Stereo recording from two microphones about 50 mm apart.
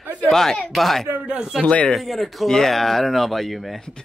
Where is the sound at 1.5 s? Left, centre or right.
Centre.